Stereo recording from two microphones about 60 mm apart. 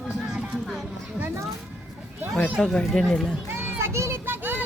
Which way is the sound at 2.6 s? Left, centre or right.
Centre.